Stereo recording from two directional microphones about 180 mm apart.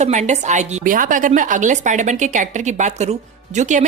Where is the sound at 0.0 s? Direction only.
40° right (ahead or behind).